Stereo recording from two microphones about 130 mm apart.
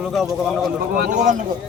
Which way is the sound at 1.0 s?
85° right.